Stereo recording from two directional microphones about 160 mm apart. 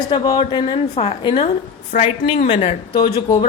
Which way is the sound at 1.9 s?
55° left (ahead or behind).